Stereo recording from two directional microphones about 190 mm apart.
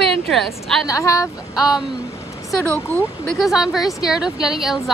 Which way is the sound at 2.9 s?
10° left (ahead or behind).